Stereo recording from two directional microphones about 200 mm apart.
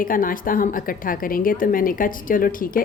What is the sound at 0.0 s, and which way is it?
A woman's voice, 45° left (ahead or behind).